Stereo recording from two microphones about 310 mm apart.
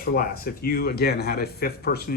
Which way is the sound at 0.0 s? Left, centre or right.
Left.